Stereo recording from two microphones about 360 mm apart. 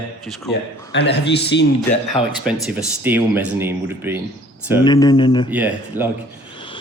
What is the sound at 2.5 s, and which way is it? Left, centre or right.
Speech, centre.